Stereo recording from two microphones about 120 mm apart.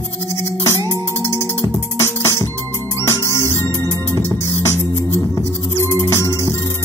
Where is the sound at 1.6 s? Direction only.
35° left (ahead or behind).